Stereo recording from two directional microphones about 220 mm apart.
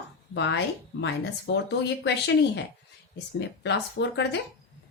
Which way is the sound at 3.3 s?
50° left (ahead or behind).